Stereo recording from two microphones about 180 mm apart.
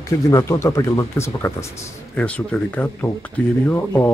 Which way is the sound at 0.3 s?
15° left (ahead or behind).